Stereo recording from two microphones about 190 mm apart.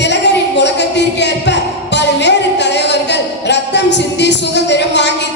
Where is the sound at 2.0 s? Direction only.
65° left (ahead or behind).